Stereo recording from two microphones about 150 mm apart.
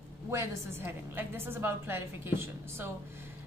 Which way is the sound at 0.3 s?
20° right (ahead or behind).